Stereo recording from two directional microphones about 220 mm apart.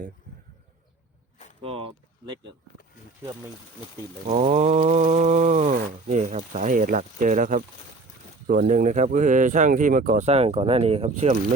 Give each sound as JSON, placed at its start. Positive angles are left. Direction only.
{"t": 1.6, "sound": "speech", "side_deg": -25}
{"t": 4.3, "sound": "speech", "side_deg": -30}